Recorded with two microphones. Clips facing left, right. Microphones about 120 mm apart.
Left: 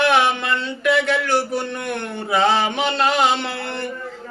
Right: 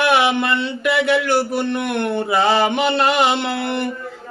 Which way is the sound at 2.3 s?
5° right (ahead or behind).